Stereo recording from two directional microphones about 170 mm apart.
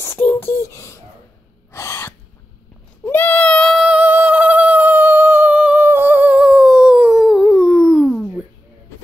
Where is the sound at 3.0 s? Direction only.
10° left (ahead or behind).